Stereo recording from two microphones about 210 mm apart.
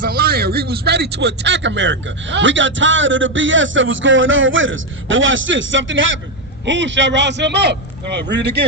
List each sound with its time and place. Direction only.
0.0 s a man's voice: 45° right (ahead or behind)